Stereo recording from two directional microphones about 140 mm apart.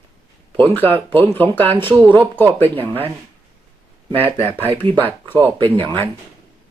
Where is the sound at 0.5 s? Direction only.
15° left (ahead or behind).